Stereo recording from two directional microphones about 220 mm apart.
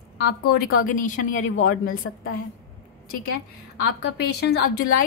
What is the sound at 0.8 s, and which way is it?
Speech, 35° left (ahead or behind).